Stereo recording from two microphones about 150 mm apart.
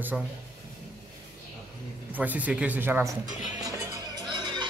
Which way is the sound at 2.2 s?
10° right (ahead or behind).